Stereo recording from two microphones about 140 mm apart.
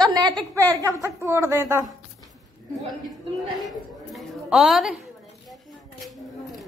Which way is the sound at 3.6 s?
Centre (ahead or behind).